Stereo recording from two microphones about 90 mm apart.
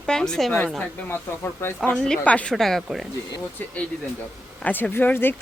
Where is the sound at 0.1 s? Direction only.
5° left (ahead or behind).